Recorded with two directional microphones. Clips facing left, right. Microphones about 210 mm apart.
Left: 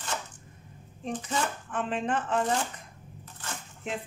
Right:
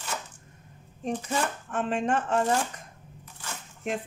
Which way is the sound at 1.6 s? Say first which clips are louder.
Right 3 dB; 45° right (ahead or behind).